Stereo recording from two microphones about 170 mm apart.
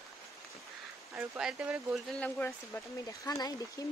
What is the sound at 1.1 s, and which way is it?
Speech, 5° right (ahead or behind).